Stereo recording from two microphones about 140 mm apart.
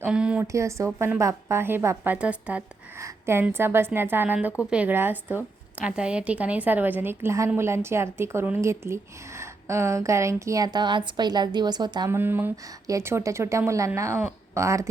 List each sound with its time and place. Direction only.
0.0 s a woman's voice: 5° right (ahead or behind)
0.4 s a woman's voice: 20° right (ahead or behind)
12.1 s a woman's voice: 15° right (ahead or behind)